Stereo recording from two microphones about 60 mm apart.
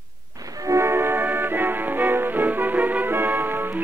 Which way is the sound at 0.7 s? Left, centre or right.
Right.